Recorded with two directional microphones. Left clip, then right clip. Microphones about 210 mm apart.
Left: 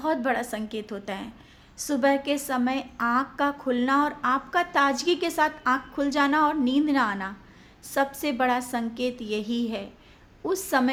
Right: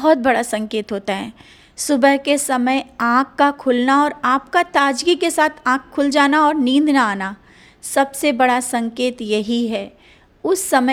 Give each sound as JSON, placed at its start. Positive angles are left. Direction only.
{"t": 0.0, "sound": "a woman's voice", "side_deg": -40}